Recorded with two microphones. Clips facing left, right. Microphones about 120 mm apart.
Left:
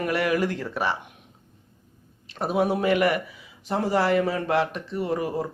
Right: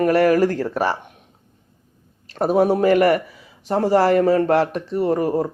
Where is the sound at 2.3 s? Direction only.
40° right (ahead or behind).